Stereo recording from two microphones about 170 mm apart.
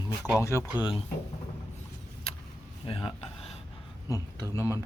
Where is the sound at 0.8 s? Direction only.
30° left (ahead or behind).